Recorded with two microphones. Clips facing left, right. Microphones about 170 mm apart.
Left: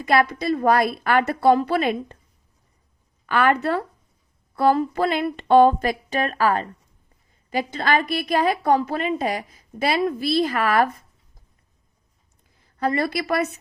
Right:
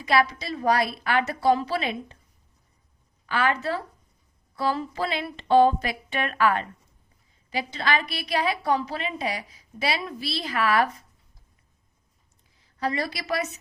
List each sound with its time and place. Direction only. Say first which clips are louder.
0.0 s a woman's voice: left 4 dB; 55° left (ahead or behind)
3.2 s a woman's voice: left 5 dB; 55° left (ahead or behind); by 6.7 s 40° left (ahead or behind)
7.5 s a woman's voice: left 5 dB; 50° left (ahead or behind)
12.5 s a woman's voice: left 5 dB; 50° left (ahead or behind)